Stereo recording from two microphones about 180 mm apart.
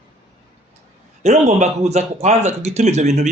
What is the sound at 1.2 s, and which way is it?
A man's voice, 40° right (ahead or behind).